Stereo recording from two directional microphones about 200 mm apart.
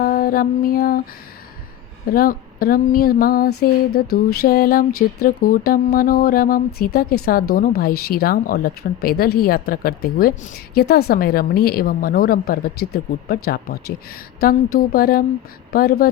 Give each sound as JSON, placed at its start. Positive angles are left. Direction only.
{"t": 0.0, "sound": "music", "side_deg": 45}
{"t": 2.1, "sound": "speech", "side_deg": 45}